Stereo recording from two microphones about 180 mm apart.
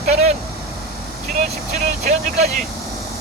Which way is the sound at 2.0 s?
40° right (ahead or behind).